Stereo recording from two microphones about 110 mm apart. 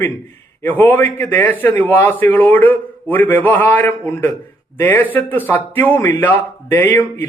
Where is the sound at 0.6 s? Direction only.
15° left (ahead or behind).